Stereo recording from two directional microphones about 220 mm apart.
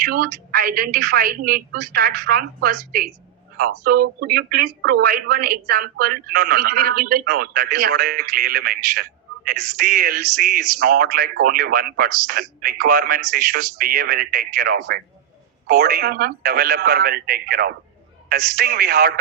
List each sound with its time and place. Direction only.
0.0 s a woman's voice: 45° right (ahead or behind)